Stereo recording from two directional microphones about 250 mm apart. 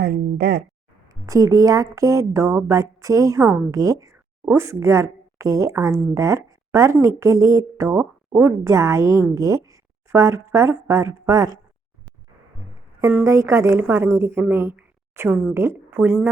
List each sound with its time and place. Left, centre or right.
0.0 s speech: right
1.0 s a woman's voice: centre
13.0 s a woman's voice: centre